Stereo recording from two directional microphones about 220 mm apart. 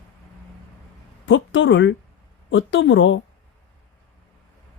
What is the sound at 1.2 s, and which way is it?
Speech, 60° left (ahead or behind).